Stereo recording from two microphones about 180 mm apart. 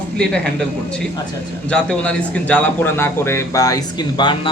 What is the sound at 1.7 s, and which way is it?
A man's voice, 5° left (ahead or behind).